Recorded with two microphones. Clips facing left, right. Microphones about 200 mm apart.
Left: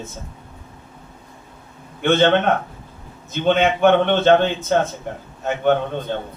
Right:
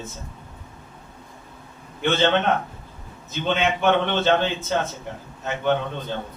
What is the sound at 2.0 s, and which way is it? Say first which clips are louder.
Speech: left 5 dB; 55° left (ahead or behind).